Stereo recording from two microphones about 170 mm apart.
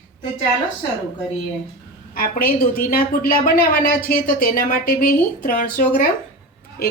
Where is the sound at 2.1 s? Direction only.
60° left (ahead or behind).